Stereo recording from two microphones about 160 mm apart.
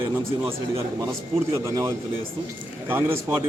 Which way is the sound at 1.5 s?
20° right (ahead or behind).